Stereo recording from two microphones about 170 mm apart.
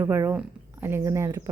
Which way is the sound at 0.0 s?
15° right (ahead or behind).